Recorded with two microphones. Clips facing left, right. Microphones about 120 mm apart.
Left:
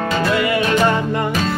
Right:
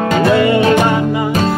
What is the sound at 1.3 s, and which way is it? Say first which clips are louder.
Music: right 5 dB; 40° right (ahead or behind).